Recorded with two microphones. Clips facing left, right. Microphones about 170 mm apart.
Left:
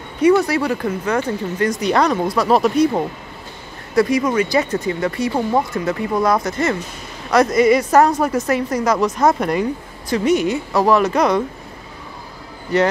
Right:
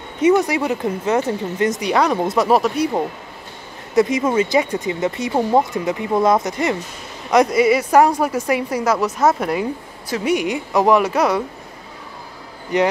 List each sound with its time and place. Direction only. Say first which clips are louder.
0.2 s speech: left 1 dB; 20° right (ahead or behind)
1.9 s speech: left 2 dB; 10° right (ahead or behind)
2.2 s speech: right 1 dB; 20° right (ahead or behind)
2.5 s speech: left 5 dB; 5° right (ahead or behind)
3.9 s speech: even; 20° right (ahead or behind)
4.6 s speech: even; 15° right (ahead or behind)
12.7 s speech: left 1 dB; 15° right (ahead or behind)